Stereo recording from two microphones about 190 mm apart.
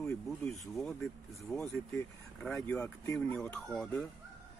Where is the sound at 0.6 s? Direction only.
Centre (ahead or behind).